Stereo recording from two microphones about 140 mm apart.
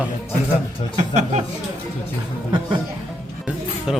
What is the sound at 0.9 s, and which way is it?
Speech, 55° right (ahead or behind).